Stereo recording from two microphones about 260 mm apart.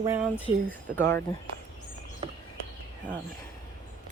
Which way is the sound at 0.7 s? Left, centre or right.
Centre.